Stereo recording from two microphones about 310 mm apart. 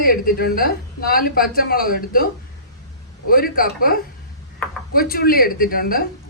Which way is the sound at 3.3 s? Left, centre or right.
Left.